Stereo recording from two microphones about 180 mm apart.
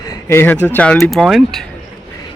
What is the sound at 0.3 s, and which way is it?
Speech, 10° left (ahead or behind).